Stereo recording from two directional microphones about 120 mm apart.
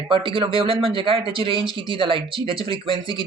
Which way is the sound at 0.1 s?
45° right (ahead or behind).